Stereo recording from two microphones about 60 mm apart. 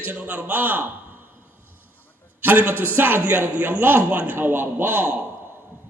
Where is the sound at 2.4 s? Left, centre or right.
Right.